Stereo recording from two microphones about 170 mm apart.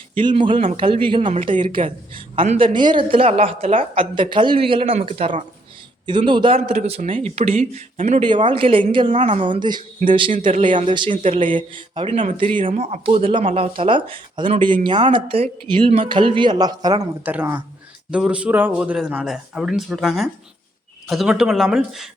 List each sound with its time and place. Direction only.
0.2 s speech: 30° right (ahead or behind)
1.4 s speech: 40° right (ahead or behind)
1.6 s speech: 30° right (ahead or behind)
7.9 s speech: 45° right (ahead or behind)
8.2 s speech: 30° right (ahead or behind)
9.0 s speech: 45° right (ahead or behind)
9.6 s speech: 25° right (ahead or behind)
17.2 s speech: 10° right (ahead or behind)